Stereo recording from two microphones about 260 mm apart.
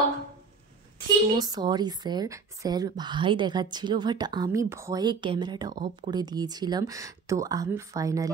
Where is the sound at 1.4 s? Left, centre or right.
Centre.